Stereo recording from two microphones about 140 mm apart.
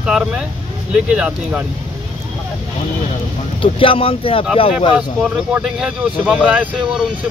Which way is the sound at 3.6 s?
40° left (ahead or behind).